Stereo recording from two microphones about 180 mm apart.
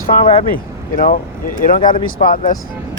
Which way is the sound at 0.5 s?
50° left (ahead or behind).